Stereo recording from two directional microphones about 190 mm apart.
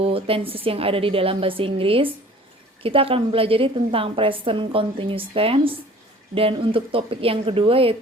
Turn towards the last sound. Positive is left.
turn(degrees=-30)  # may be behind; listen again after turning